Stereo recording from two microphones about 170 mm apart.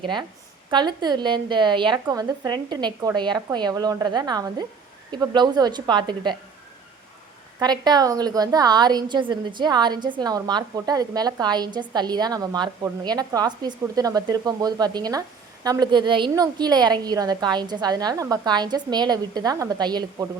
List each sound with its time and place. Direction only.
0.0 s a woman's voice: 25° right (ahead or behind)
7.6 s a woman's voice: 25° right (ahead or behind)